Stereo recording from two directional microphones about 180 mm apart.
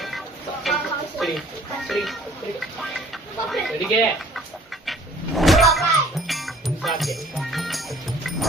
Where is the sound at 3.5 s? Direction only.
Centre (ahead or behind).